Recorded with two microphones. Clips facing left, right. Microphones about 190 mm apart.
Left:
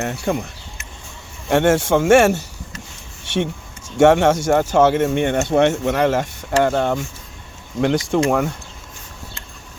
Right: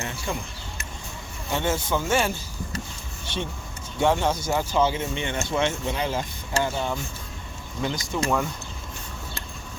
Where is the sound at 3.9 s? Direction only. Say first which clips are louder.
Left 10 dB; 75° left (ahead or behind).